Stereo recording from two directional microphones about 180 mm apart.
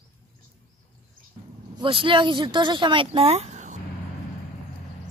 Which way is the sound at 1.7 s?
30° right (ahead or behind).